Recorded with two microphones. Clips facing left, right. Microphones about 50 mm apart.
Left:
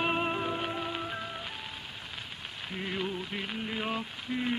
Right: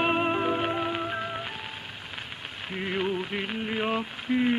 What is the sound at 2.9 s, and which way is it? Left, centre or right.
Music, right.